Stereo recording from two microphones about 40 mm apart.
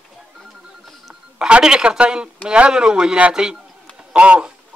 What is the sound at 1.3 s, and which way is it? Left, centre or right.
A man's voice, right.